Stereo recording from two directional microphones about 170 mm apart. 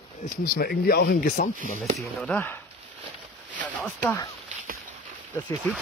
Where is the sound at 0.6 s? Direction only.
60° left (ahead or behind).